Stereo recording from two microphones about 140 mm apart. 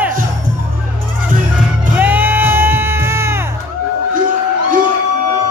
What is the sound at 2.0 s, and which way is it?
Music, 15° right (ahead or behind).